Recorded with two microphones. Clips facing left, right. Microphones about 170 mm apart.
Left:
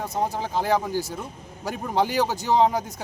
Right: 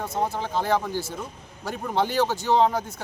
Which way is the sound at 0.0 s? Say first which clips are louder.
Even; 15° left (ahead or behind).